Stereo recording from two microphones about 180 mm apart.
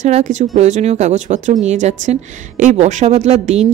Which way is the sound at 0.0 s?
40° right (ahead or behind).